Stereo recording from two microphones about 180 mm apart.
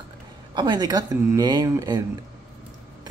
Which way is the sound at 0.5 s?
25° right (ahead or behind).